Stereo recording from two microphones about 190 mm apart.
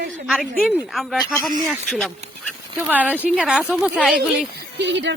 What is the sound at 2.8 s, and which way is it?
A woman's voice, 10° right (ahead or behind).